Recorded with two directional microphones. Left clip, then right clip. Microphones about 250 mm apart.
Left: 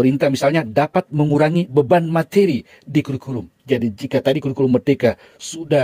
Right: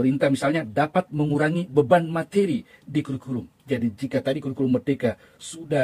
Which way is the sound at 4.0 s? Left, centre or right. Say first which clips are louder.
Left 7 dB; left.